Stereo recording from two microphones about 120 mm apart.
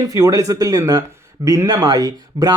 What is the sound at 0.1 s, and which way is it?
Speech, 30° right (ahead or behind).